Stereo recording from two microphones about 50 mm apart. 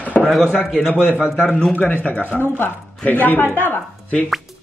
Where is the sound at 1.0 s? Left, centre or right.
Right.